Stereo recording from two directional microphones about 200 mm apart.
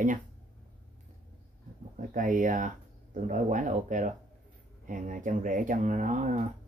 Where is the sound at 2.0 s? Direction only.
40° right (ahead or behind).